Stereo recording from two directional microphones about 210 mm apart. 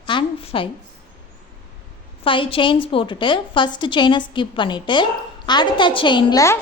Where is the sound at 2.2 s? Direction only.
25° left (ahead or behind).